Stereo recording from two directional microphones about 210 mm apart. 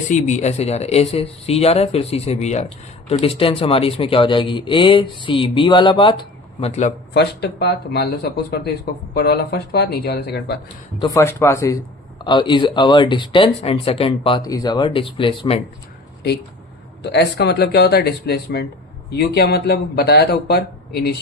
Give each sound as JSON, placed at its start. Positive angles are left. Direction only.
{"t": 0.1, "sound": "speech", "side_deg": 35}
{"t": 7.1, "sound": "speech", "side_deg": 50}
{"t": 11.0, "sound": "speech", "side_deg": 15}
{"t": 17.0, "sound": "speech", "side_deg": 55}